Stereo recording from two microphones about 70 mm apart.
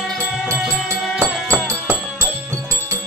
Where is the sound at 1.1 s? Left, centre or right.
Right.